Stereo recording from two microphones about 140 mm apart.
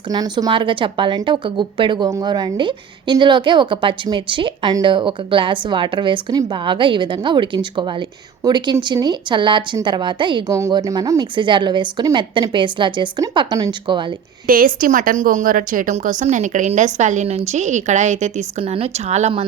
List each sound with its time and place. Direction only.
0.1 s a woman's voice: 30° right (ahead or behind)
10.5 s a woman's voice: 25° right (ahead or behind)
14.4 s a woman's voice: 90° right; by 19.3 s 50° right (ahead or behind)